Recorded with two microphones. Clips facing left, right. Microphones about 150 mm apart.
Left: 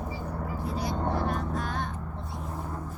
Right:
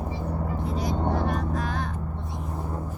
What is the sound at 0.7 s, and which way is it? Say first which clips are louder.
Vehicle: right 3 dB; centre (ahead or behind).